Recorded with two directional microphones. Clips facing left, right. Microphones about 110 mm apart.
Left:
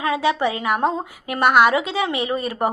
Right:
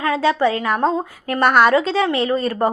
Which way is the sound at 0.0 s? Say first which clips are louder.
Right 3 dB; 20° left (ahead or behind).